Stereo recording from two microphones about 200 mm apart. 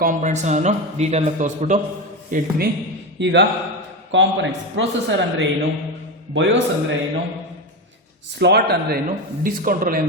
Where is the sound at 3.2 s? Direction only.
65° right (ahead or behind).